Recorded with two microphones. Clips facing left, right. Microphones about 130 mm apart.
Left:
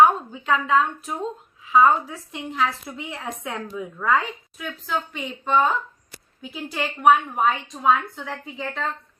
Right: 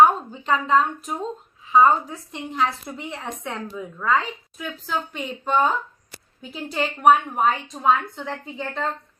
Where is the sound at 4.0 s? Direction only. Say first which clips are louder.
Even; 15° left (ahead or behind).